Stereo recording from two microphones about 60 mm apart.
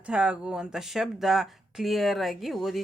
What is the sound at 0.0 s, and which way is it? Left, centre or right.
Speech, centre.